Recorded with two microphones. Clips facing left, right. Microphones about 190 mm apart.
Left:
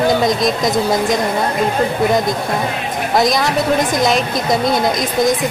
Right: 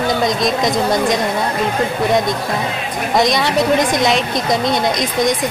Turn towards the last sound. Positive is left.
turn(degrees=0)  # may be behind; listen again after turning